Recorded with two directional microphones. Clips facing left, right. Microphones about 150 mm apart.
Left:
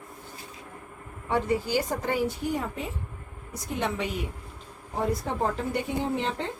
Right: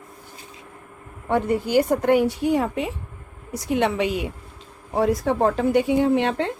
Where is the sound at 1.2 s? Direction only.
55° right (ahead or behind).